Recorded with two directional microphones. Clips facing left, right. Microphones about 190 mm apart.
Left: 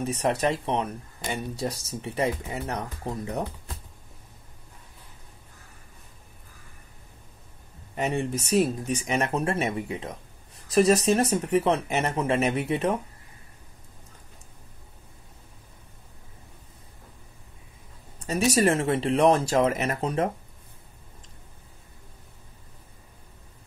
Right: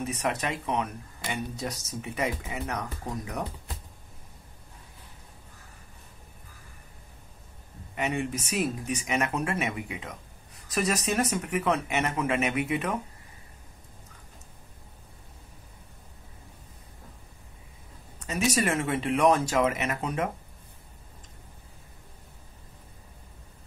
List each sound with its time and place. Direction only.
0.0 s speech: 30° left (ahead or behind)
7.9 s speech: 35° left (ahead or behind)
18.2 s speech: 35° left (ahead or behind)